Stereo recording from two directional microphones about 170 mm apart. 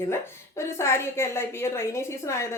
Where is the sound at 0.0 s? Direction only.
15° left (ahead or behind).